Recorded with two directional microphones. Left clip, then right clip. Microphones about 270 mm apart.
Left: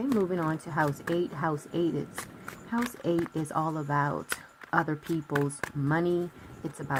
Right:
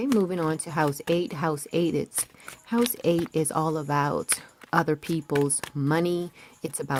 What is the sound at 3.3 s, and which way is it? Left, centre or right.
Speech, right.